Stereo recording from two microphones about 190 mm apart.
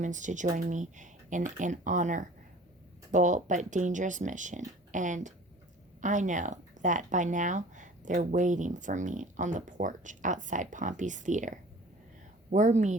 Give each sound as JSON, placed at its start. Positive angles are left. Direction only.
{"t": 0.0, "sound": "speech", "side_deg": -40}